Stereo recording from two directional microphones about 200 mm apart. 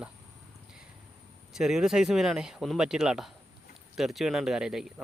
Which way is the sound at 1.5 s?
5° right (ahead or behind).